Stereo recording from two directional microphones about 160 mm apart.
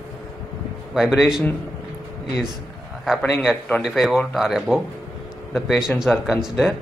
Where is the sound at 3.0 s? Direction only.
Centre (ahead or behind).